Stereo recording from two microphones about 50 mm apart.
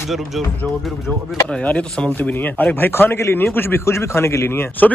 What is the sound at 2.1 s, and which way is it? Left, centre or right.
A man's voice, left.